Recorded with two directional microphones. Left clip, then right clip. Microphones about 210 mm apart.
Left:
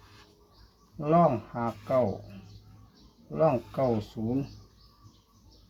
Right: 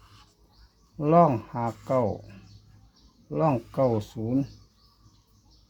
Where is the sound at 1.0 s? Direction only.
55° right (ahead or behind).